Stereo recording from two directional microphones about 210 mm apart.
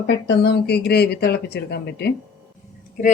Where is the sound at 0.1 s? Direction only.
55° left (ahead or behind).